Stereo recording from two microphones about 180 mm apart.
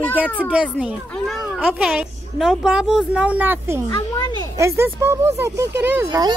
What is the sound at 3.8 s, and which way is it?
Speech, 20° left (ahead or behind).